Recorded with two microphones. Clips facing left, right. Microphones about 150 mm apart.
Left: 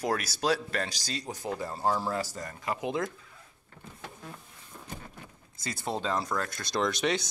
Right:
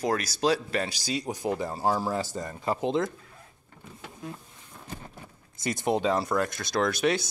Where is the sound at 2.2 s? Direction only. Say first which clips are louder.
Right 5 dB; 25° right (ahead or behind).